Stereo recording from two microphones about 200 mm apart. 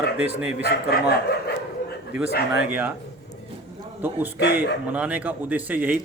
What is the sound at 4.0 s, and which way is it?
A man's voice, 10° right (ahead or behind).